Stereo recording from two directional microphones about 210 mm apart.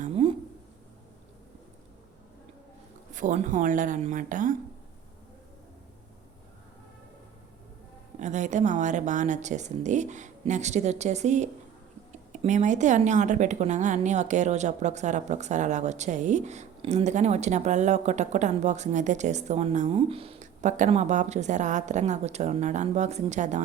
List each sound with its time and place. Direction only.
0.0 s a sound: 30° right (ahead or behind)
3.1 s a woman's voice: 35° right (ahead or behind)
8.2 s a woman's voice: 35° right (ahead or behind)